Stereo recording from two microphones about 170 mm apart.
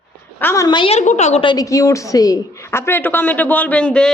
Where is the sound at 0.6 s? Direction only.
30° left (ahead or behind).